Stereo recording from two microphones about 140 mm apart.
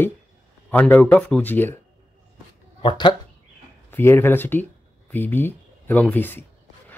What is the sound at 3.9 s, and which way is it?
Speech, 15° left (ahead or behind).